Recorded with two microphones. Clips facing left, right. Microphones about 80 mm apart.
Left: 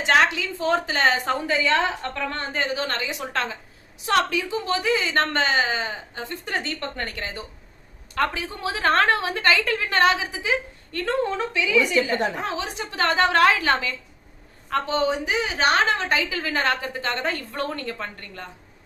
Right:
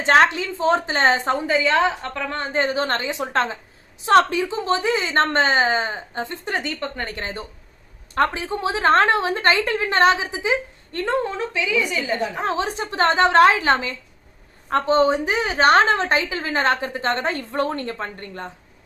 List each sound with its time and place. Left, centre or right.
0.0 s a woman's voice: right
12.4 s a woman's voice: right